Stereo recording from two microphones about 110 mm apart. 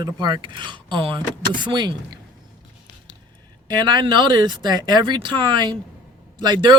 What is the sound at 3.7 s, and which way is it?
Speech, 40° right (ahead or behind).